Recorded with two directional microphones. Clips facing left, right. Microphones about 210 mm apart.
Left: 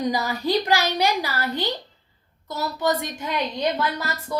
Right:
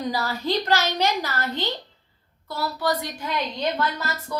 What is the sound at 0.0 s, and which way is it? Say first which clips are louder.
A woman's voice: left 3 dB; 15° left (ahead or behind).